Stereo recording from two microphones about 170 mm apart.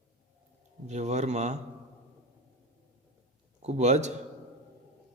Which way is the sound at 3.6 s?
40° right (ahead or behind).